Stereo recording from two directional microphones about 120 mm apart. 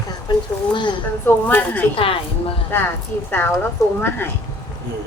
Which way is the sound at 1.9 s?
45° left (ahead or behind).